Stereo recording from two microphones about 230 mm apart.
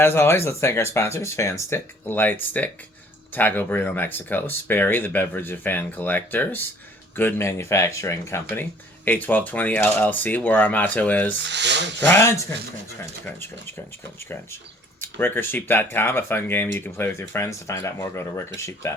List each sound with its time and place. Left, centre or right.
0.0 s speech: centre
11.4 s speech: right
11.9 s speech: centre
15.2 s speech: centre